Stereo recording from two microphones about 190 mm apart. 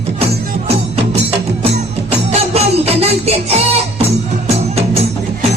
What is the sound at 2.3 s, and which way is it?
Music, 30° right (ahead or behind).